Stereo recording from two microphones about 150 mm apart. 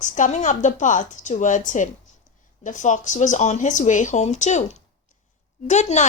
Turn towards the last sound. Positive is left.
turn(degrees=50)  # may be behind; listen again after turning